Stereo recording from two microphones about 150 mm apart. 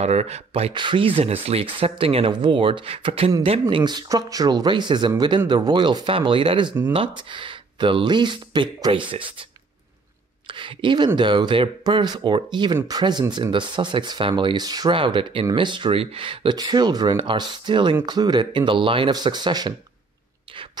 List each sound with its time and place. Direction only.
0.0 s speech: 45° right (ahead or behind)
10.4 s a woman's voice: 35° right (ahead or behind)